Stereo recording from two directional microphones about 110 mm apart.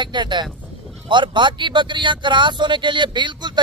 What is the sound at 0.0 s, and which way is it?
Speech, 45° right (ahead or behind).